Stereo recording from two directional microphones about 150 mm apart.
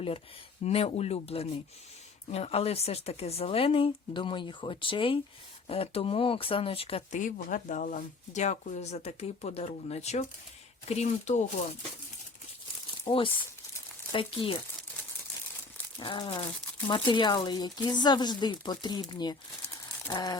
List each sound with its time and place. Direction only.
0.6 s a woman's voice: 45° left (ahead or behind)
7.1 s a woman's voice: 55° left (ahead or behind)
13.1 s speech: 35° left (ahead or behind)
16.0 s speech: 35° left (ahead or behind)